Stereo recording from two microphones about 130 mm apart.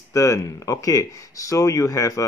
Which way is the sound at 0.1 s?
25° left (ahead or behind).